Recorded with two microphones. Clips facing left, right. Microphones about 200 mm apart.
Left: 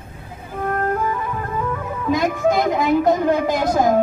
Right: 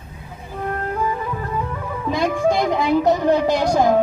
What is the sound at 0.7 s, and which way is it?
Music, 45° left (ahead or behind).